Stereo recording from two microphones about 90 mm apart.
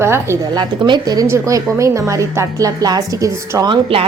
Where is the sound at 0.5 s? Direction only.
55° right (ahead or behind).